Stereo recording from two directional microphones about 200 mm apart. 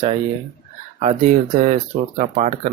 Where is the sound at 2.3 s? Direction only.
35° right (ahead or behind).